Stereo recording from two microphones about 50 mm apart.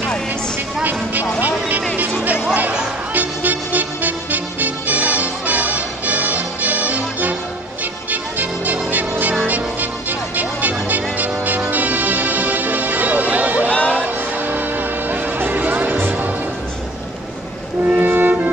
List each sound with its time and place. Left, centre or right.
3.1 s music: right
13.7 s music: left
14.0 s vehicle: right
15.3 s music: right
17.8 s music: right